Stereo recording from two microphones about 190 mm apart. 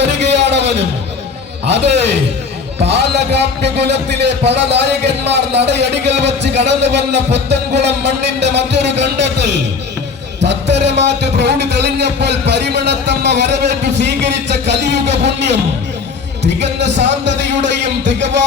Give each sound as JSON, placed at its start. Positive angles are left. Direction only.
{"t": 0.0, "sound": "a sound", "side_deg": -65}
{"t": 1.6, "sound": "speech", "side_deg": -65}
{"t": 16.4, "sound": "a man's voice", "side_deg": -65}